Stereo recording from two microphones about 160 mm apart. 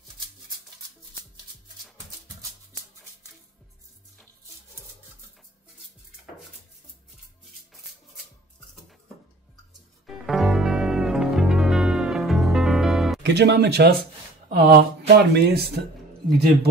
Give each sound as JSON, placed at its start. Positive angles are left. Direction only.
{"t": 10.0, "sound": "music", "side_deg": 0}
{"t": 13.2, "sound": "speech", "side_deg": -90}
{"t": 14.5, "sound": "speech", "side_deg": -80}